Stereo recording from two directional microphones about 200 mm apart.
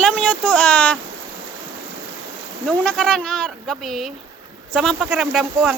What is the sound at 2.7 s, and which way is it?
Speech, 5° left (ahead or behind).